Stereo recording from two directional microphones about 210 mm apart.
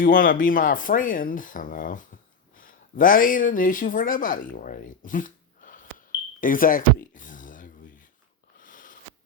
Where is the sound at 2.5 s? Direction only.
40° left (ahead or behind).